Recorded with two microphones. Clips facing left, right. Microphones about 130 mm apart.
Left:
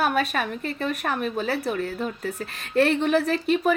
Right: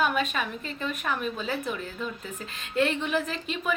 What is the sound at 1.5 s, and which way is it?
Speech, 65° left (ahead or behind).